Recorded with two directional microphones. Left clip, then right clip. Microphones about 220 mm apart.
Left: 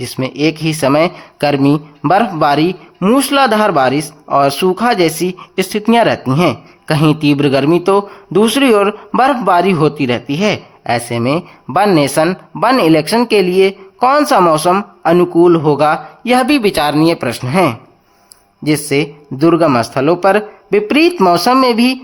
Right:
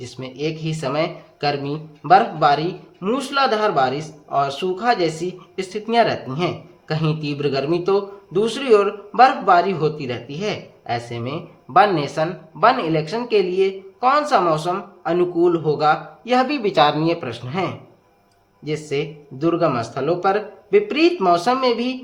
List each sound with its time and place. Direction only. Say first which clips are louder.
0.0 s a man's voice: left 11 dB; 40° left (ahead or behind)